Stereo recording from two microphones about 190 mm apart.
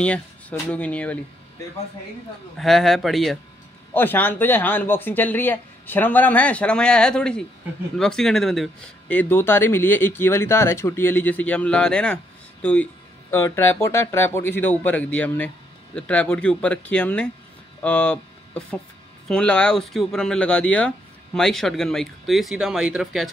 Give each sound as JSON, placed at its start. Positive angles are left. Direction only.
{"t": 0.0, "sound": "speech", "side_deg": 5}
{"t": 2.5, "sound": "speech", "side_deg": 0}
{"t": 3.9, "sound": "speech", "side_deg": 10}
{"t": 13.3, "sound": "speech", "side_deg": 15}